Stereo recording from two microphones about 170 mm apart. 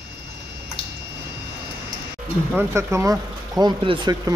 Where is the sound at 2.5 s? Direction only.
15° right (ahead or behind).